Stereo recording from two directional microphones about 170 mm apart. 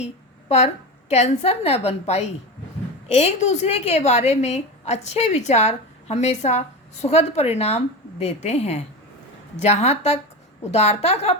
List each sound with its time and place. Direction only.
0.0 s a woman's voice: 40° left (ahead or behind)